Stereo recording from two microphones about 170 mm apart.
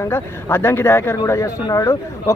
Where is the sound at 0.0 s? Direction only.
15° left (ahead or behind).